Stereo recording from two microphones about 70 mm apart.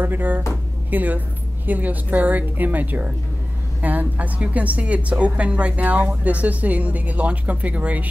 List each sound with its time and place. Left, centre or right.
0.0 s a woman's voice: right